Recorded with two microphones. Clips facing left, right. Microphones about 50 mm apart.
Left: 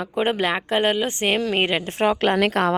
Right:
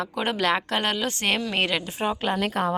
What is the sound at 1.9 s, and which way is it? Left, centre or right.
Speech, left.